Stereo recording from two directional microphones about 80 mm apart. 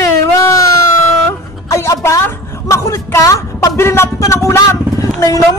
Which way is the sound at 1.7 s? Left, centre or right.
Left.